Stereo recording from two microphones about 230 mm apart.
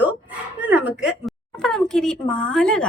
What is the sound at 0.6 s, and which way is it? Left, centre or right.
A woman's voice, centre.